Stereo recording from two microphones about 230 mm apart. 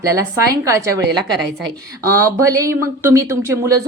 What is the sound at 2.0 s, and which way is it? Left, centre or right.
A woman's voice, centre.